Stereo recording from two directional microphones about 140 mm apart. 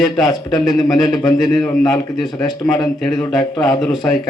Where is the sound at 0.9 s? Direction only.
30° left (ahead or behind).